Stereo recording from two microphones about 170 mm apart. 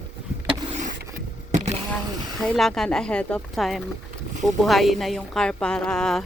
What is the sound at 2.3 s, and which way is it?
A woman's voice, centre (ahead or behind).